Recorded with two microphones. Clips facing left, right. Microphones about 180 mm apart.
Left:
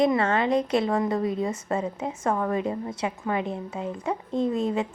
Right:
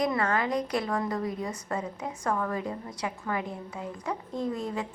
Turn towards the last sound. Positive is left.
turn(degrees=25)  # may be behind; listen again after turning